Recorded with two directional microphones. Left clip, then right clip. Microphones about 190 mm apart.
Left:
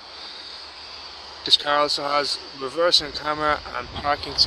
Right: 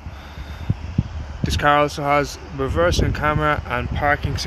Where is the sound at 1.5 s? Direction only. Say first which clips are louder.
Right 2 dB; 15° right (ahead or behind).